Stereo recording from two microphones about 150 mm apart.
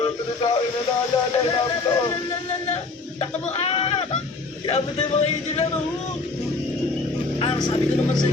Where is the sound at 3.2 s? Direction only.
40° left (ahead or behind).